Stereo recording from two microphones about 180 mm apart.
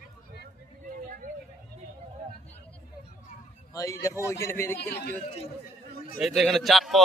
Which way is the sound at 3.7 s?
15° left (ahead or behind).